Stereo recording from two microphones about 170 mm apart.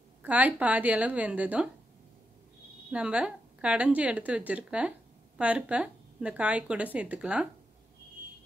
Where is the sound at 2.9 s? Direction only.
5° right (ahead or behind).